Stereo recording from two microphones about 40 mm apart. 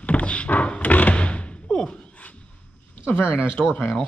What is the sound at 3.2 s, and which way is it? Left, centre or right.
Speech, left.